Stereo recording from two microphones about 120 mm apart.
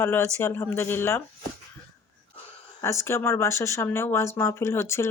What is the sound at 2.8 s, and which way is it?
Speech, 20° left (ahead or behind).